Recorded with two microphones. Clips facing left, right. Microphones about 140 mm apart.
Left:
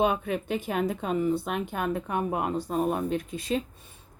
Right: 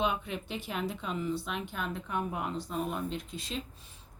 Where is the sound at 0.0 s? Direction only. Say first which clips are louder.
Left 7 dB; 50° left (ahead or behind).